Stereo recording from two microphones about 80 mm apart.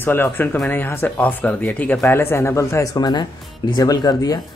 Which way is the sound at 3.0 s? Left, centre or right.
Left.